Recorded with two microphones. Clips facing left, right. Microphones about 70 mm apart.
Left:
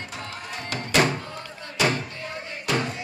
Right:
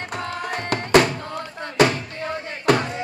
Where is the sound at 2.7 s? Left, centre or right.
Right.